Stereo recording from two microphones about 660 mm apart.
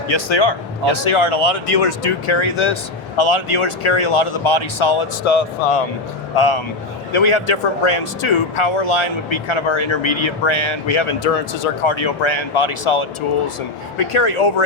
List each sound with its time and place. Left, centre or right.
0.1 s speech: left
6.3 s speech: left
11.9 s speech: left